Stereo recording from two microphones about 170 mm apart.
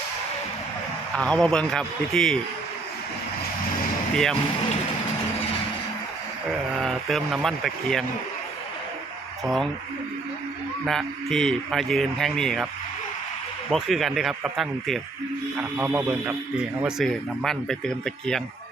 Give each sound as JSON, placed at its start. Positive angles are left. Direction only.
{"t": 1.1, "sound": "a man's voice", "side_deg": 5}
{"t": 4.1, "sound": "speech", "side_deg": 5}
{"t": 6.7, "sound": "speech", "side_deg": 0}
{"t": 9.4, "sound": "speech", "side_deg": 0}
{"t": 10.8, "sound": "a man's voice", "side_deg": 0}
{"t": 13.7, "sound": "a man's voice", "side_deg": 0}
{"t": 15.5, "sound": "speech", "side_deg": -10}
{"t": 16.8, "sound": "a man's voice", "side_deg": 0}